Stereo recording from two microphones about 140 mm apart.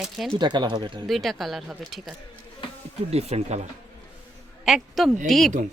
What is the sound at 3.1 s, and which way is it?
Speech, 50° right (ahead or behind).